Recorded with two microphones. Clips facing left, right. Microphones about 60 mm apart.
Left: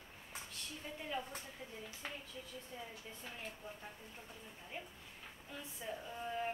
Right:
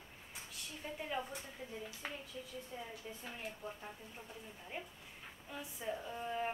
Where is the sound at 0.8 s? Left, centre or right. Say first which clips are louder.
Right 4 dB; centre.